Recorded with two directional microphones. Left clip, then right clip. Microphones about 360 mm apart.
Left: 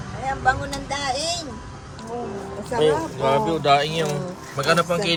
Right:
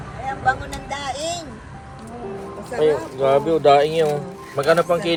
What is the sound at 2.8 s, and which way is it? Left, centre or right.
Speech, centre.